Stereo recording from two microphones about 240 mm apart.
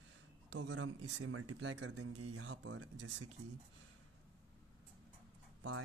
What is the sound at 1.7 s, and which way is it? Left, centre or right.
Speech, right.